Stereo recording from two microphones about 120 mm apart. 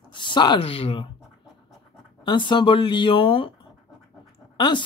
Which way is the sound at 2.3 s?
40° left (ahead or behind).